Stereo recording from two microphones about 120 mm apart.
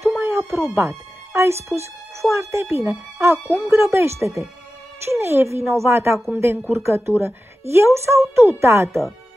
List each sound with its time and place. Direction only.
0.1 s music: 20° right (ahead or behind)
0.7 s speech: 20° right (ahead or behind)